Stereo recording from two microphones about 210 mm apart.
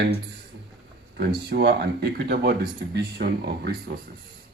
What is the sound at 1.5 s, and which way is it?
Speech, 50° right (ahead or behind).